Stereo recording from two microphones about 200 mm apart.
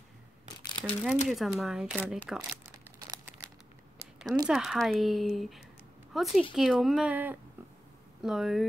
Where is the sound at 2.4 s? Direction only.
15° right (ahead or behind).